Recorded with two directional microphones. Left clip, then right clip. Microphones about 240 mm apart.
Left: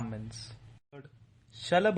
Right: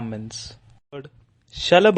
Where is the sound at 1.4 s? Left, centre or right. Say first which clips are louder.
Right 12 dB; right.